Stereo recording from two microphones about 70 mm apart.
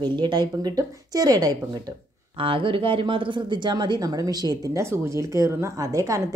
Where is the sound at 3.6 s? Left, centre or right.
Right.